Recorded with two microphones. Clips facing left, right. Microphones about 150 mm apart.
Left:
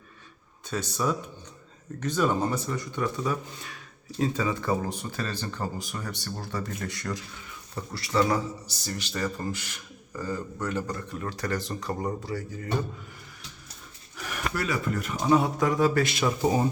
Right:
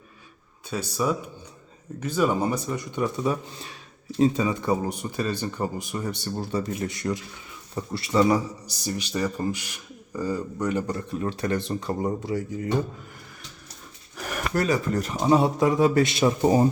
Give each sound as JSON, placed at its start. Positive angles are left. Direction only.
{"t": 0.7, "sound": "a man's voice", "side_deg": -10}
{"t": 14.2, "sound": "speech", "side_deg": -45}